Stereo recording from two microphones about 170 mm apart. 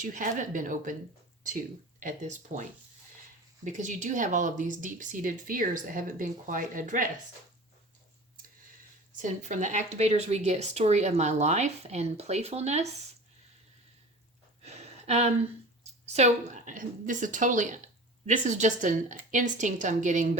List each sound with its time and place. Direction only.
0.0 s speech: 50° right (ahead or behind)
2.0 s speech: 50° right (ahead or behind)
9.2 s speech: 45° right (ahead or behind)
14.6 s a sound: 40° right (ahead or behind)
16.5 s speech: 45° right (ahead or behind)